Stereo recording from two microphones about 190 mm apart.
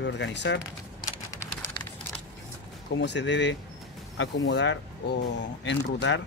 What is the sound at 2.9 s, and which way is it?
Speech, 70° left (ahead or behind).